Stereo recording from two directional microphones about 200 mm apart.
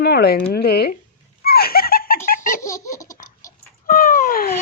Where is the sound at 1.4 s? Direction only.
50° left (ahead or behind).